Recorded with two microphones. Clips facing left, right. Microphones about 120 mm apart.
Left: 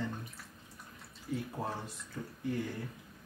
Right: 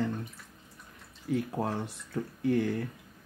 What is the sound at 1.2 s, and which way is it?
Speech, 70° right (ahead or behind).